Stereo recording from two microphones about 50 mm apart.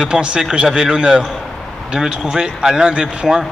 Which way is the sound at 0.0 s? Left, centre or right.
Centre.